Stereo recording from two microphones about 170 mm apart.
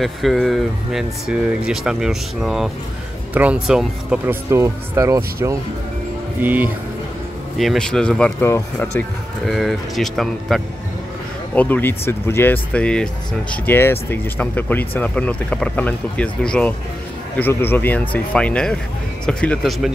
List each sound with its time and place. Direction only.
0.0 s speech: centre (ahead or behind)
4.5 s speech: 15° right (ahead or behind)
7.5 s speech: centre (ahead or behind)
9.5 s speech: centre (ahead or behind)